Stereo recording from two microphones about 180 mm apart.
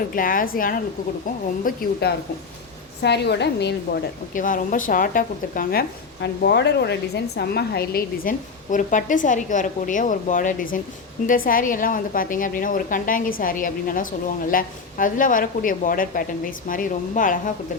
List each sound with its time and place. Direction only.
0.1 s a woman's voice: 50° left (ahead or behind); by 4.0 s 70° left (ahead or behind)
4.4 s a woman's voice: 50° left (ahead or behind)
6.2 s a woman's voice: 70° left (ahead or behind); by 17.5 s 50° left (ahead or behind)